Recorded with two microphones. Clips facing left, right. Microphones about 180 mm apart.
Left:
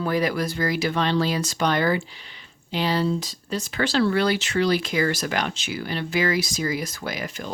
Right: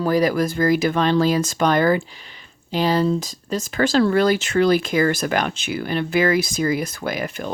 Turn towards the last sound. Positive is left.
turn(degrees=-55)  # may be behind; listen again after turning